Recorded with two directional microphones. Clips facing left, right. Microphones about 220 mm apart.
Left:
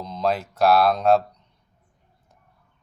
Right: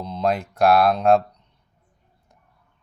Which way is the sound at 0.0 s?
10° right (ahead or behind).